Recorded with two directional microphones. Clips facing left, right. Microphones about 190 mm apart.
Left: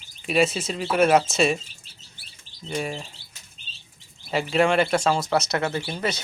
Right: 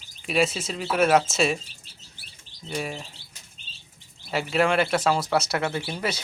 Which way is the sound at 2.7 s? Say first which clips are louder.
Left 2 dB; centre (ahead or behind).